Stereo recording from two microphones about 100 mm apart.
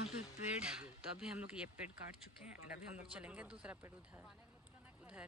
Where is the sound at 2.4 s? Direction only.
10° right (ahead or behind).